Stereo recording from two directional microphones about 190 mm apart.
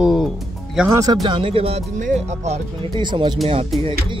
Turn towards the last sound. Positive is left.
turn(degrees=-30)  # may be behind; listen again after turning